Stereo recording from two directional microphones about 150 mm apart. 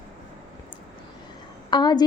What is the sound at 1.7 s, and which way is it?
Speech, 30° left (ahead or behind).